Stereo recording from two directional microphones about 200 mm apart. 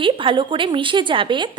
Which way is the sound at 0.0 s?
25° right (ahead or behind).